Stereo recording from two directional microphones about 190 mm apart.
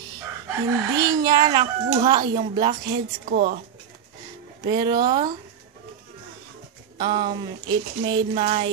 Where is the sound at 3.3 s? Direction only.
50° right (ahead or behind).